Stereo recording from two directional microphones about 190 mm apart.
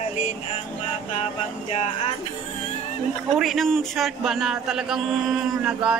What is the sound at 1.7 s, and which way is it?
Speech, 35° left (ahead or behind).